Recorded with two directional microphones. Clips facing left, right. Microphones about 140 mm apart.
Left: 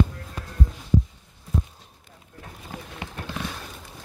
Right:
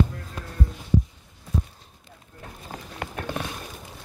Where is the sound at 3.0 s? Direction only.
50° right (ahead or behind).